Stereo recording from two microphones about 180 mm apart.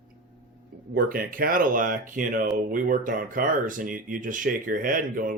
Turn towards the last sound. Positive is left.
turn(degrees=-50)  # may be behind; listen again after turning